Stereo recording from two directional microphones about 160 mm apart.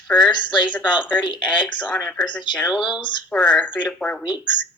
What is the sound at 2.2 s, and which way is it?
Speech, 30° left (ahead or behind).